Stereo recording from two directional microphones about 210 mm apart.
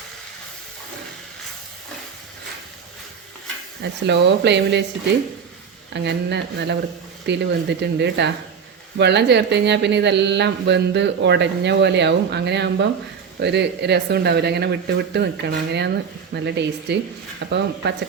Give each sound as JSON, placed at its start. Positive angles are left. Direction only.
{"t": 4.0, "sound": "speech", "side_deg": -55}
{"t": 5.9, "sound": "speech", "side_deg": -55}